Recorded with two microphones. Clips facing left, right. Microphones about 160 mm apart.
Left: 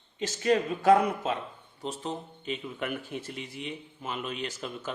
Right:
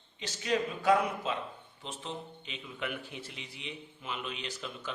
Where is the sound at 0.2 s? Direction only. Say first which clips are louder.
Left 6 dB; 50° left (ahead or behind).